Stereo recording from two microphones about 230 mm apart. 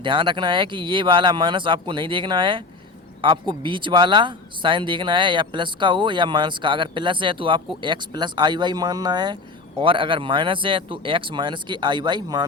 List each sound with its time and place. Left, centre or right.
0.0 s speech: right